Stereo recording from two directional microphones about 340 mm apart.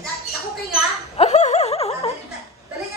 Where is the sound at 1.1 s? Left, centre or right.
Centre.